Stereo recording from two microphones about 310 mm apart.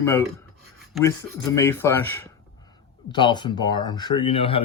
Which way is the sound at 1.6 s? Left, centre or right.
Centre.